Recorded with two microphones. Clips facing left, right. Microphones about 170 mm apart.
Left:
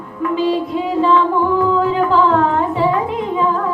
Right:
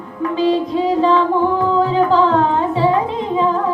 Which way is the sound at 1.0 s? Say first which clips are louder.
Left 2 dB; 35° right (ahead or behind).